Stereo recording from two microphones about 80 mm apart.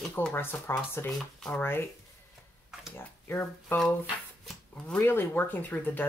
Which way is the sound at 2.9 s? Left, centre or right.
Left.